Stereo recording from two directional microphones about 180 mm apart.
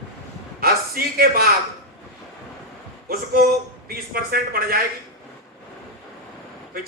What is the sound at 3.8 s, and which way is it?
A man's voice, 55° right (ahead or behind).